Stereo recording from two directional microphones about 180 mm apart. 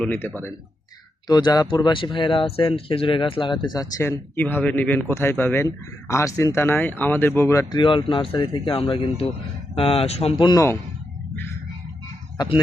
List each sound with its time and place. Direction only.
0.0 s speech: 10° left (ahead or behind)
1.3 s speech: 20° left (ahead or behind)